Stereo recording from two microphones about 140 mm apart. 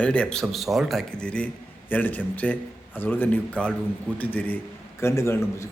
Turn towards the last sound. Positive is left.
turn(degrees=20)  # may be behind; listen again after turning